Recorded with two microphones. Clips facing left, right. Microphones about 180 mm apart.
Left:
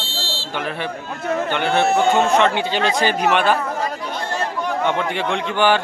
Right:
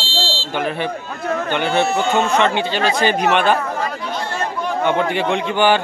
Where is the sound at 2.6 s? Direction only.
15° left (ahead or behind).